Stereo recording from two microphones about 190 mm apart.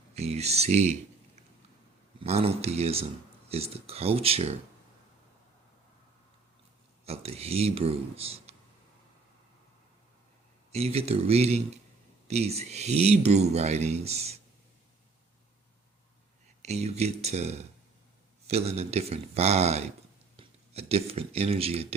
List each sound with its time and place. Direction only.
0.1 s speech: 35° right (ahead or behind)
2.2 s speech: 30° right (ahead or behind)
7.0 s speech: 30° right (ahead or behind)
10.7 s speech: 35° right (ahead or behind)
16.6 s speech: 35° right (ahead or behind)